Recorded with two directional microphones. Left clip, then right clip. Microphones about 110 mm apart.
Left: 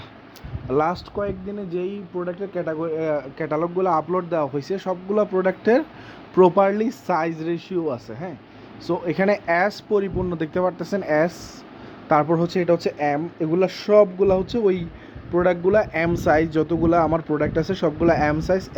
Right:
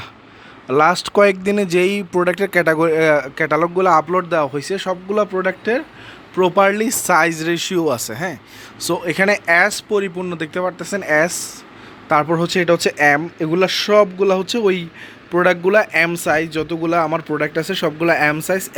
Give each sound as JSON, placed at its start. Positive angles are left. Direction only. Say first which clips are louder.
{"t": 0.7, "sound": "speech", "louder": "right 7 dB", "side_deg": -5}
{"t": 1.1, "sound": "speech", "louder": "right 14 dB", "side_deg": -45}
{"t": 3.0, "sound": "a man's voice", "louder": "right 8 dB", "side_deg": -20}
{"t": 3.3, "sound": "speech", "louder": "right 7 dB", "side_deg": -5}
{"t": 6.6, "sound": "speech", "louder": "right 4 dB", "side_deg": 5}
{"t": 7.6, "sound": "speech", "louder": "right 7 dB", "side_deg": -20}
{"t": 8.8, "sound": "speech", "louder": "right 5 dB", "side_deg": 5}
{"t": 12.9, "sound": "speech", "louder": "right 9 dB", "side_deg": -15}
{"t": 13.4, "sound": "speech", "louder": "right 5 dB", "side_deg": 0}
{"t": 16.1, "sound": "speech", "louder": "right 1 dB", "side_deg": 20}